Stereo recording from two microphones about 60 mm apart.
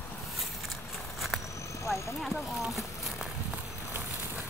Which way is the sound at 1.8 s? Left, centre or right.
Left.